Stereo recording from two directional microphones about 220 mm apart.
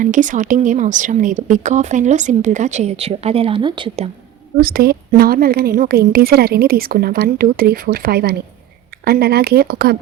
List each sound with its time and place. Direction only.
0.0 s speech: 35° right (ahead or behind)
4.6 s a woman's voice: 40° right (ahead or behind)